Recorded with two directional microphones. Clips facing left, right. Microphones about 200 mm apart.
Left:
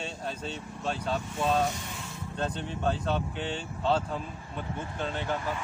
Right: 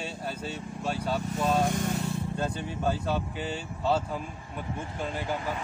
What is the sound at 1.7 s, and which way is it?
Vehicle, 50° right (ahead or behind).